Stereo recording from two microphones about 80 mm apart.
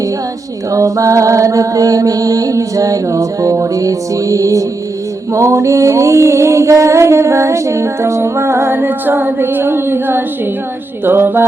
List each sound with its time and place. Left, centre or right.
0.7 s music: right